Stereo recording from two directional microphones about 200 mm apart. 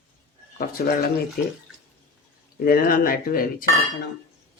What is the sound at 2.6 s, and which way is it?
Speech, 45° left (ahead or behind).